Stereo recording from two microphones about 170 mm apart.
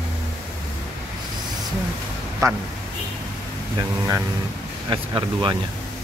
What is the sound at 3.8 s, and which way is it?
Speech, 15° right (ahead or behind).